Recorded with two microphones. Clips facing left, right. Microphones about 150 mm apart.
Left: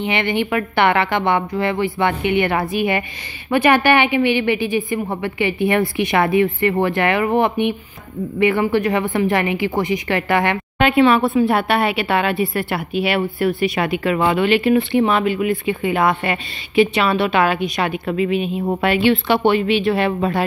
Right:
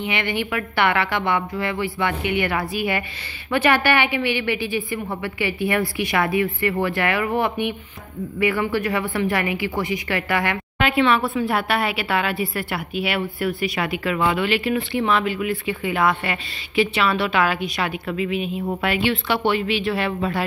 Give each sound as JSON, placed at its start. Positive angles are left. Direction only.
{"t": 0.0, "sound": "a woman's voice", "side_deg": 25}
{"t": 18.0, "sound": "a woman's voice", "side_deg": 40}
{"t": 19.4, "sound": "speech", "side_deg": 50}